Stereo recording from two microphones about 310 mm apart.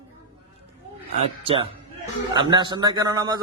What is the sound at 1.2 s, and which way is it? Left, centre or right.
A man's voice, centre.